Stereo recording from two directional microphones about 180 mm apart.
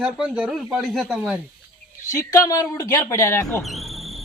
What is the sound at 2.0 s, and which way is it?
Speech, 20° left (ahead or behind).